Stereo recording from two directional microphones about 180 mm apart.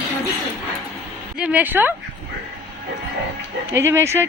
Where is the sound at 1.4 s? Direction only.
10° right (ahead or behind).